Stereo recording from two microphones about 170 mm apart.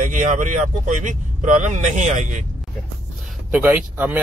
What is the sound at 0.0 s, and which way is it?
Speech, 45° right (ahead or behind).